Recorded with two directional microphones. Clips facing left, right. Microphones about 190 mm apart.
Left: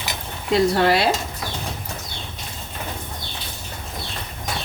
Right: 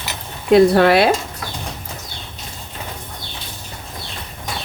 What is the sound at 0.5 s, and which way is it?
Speech, 60° right (ahead or behind).